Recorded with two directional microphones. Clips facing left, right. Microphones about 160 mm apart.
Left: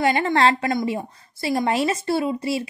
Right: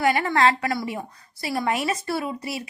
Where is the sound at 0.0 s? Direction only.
25° left (ahead or behind).